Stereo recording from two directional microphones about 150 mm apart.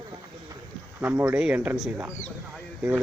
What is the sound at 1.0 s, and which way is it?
Speech, 15° right (ahead or behind).